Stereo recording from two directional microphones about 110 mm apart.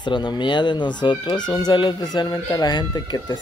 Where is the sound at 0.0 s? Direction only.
45° left (ahead or behind).